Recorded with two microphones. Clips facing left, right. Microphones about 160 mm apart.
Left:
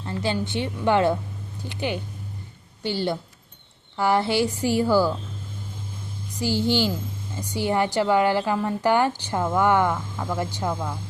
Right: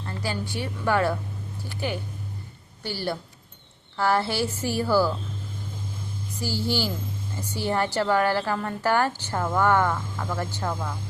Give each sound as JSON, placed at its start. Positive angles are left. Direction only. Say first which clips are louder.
{"t": 0.0, "sound": "a woman's voice", "louder": "left 5 dB", "side_deg": 20}
{"t": 6.4, "sound": "a woman's voice", "louder": "left 5 dB", "side_deg": 20}